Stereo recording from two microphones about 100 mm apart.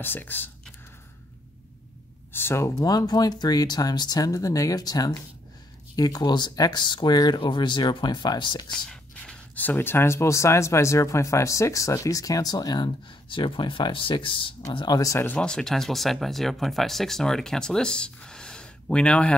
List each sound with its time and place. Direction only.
0.0 s speech: 20° left (ahead or behind)
2.3 s speech: 25° left (ahead or behind); by 8.6 s 45° left (ahead or behind)
8.8 s speech: 10° left (ahead or behind); by 15.0 s 55° left (ahead or behind)
15.0 s speech: 35° left (ahead or behind)
15.2 s speech: 10° left (ahead or behind)